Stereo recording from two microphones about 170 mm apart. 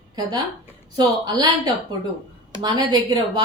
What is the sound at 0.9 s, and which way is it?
A woman's voice, 25° right (ahead or behind).